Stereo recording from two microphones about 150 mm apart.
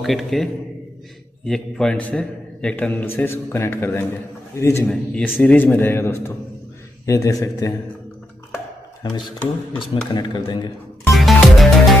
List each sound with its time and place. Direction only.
0.0 s a man's voice: centre (ahead or behind); by 4.8 s 15° left (ahead or behind)
4.8 s a man's voice: 5° left (ahead or behind); by 7.7 s 25° left (ahead or behind)
9.8 s speech: 30° left (ahead or behind)
11.1 s music: centre (ahead or behind)